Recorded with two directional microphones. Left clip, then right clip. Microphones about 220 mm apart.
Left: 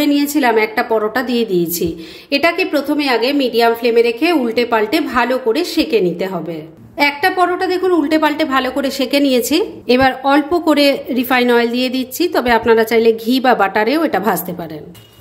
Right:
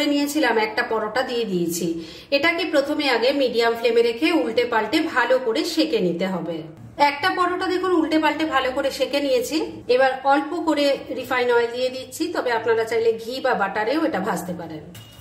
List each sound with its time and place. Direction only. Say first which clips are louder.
0.0 s a woman's voice: left 6 dB; 35° left (ahead or behind)